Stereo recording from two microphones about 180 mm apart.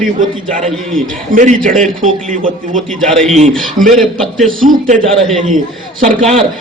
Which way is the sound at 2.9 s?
Centre (ahead or behind).